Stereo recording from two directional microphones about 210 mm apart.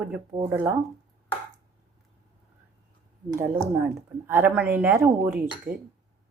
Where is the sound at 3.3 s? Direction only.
10° right (ahead or behind).